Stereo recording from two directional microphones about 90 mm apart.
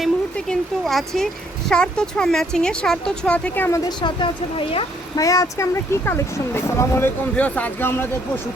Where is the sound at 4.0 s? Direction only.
60° left (ahead or behind).